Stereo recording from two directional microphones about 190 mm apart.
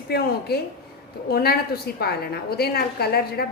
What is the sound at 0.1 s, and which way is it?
A woman's voice, 55° left (ahead or behind).